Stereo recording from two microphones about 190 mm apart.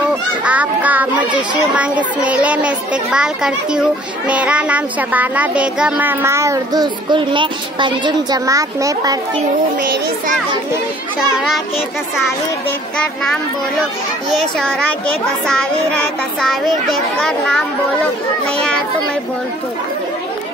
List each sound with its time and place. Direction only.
0.4 s a child's voice: 5° right (ahead or behind)
9.8 s a child's voice: 45° right (ahead or behind)
11.1 s a child's voice: centre (ahead or behind)
16.3 s a child's voice: centre (ahead or behind)